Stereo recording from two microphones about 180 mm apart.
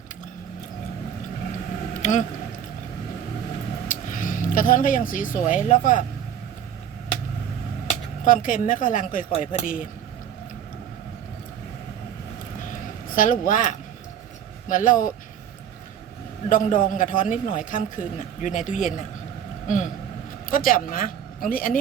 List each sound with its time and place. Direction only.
2.0 s speech: 45° left (ahead or behind)
3.8 s speech: 45° left (ahead or behind)
8.2 s speech: 50° left (ahead or behind)
13.1 s speech: 45° left (ahead or behind)
16.5 s speech: 50° left (ahead or behind)